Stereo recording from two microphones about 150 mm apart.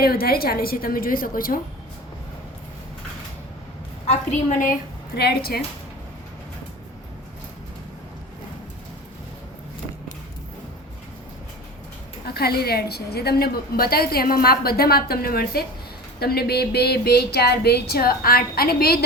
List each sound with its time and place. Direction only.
0.0 s a woman's voice: 90° left; by 1.5 s 75° left (ahead or behind)
5.1 s a woman's voice: 90° left
12.2 s a woman's voice: 90° left